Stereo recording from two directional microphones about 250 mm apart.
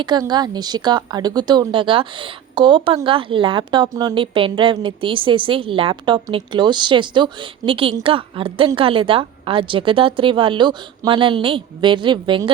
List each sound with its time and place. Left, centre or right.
0.0 s a woman's voice: centre